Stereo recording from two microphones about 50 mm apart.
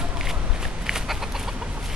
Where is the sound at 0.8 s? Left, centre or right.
Centre.